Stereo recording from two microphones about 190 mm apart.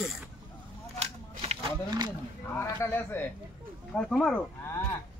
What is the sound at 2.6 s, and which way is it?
Speech, 15° left (ahead or behind).